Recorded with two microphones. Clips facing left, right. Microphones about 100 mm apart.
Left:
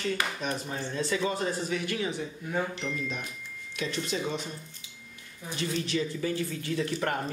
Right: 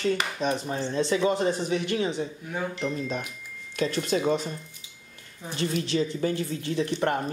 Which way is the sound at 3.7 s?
40° right (ahead or behind).